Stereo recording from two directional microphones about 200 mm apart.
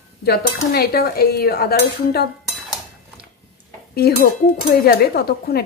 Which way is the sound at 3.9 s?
50° left (ahead or behind).